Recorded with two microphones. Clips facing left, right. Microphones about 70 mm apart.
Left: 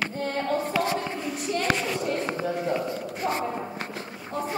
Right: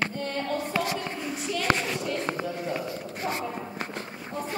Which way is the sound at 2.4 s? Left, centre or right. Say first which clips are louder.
Left 4 dB; left.